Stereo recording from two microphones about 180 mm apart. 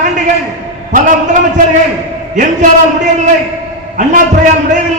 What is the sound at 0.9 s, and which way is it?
A man's voice, 45° right (ahead or behind).